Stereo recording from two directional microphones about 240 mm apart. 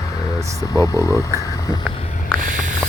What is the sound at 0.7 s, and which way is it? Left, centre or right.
Speech, centre.